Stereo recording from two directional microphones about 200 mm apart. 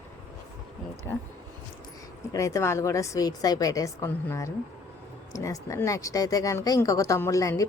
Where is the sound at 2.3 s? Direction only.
15° left (ahead or behind).